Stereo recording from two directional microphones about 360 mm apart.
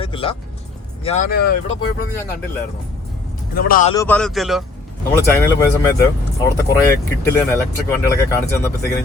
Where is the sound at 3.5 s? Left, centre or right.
Left.